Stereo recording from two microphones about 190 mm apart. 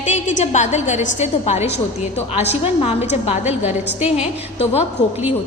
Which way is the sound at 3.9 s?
5° right (ahead or behind).